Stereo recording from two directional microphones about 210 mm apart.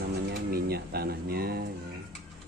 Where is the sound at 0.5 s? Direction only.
50° right (ahead or behind).